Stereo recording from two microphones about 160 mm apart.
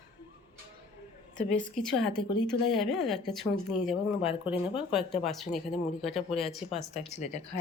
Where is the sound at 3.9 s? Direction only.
40° left (ahead or behind).